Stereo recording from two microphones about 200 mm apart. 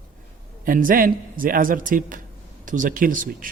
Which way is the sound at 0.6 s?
45° right (ahead or behind).